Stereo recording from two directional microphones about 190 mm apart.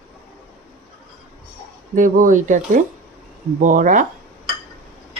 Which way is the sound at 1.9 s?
45° right (ahead or behind).